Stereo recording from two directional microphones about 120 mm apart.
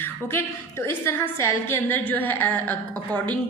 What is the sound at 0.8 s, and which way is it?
A woman's voice, 20° left (ahead or behind).